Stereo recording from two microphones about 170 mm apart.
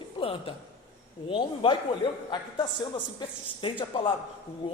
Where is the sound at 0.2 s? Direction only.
30° left (ahead or behind).